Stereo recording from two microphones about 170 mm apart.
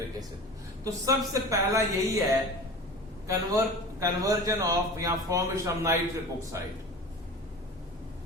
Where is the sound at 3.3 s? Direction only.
20° right (ahead or behind).